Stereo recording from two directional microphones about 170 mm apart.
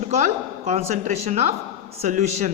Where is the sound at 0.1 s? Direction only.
40° right (ahead or behind).